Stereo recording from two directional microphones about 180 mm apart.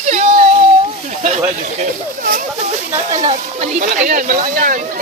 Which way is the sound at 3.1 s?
40° right (ahead or behind).